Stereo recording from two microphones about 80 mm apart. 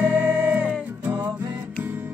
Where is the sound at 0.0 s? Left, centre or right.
Right.